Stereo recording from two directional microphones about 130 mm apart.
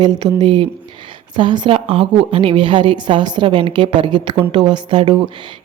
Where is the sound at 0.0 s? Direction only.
35° right (ahead or behind).